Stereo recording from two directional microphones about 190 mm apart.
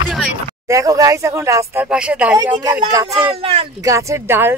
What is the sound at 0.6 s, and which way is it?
Speech, 15° right (ahead or behind).